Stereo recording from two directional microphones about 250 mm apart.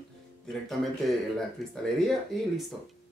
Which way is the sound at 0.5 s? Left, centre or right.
Centre.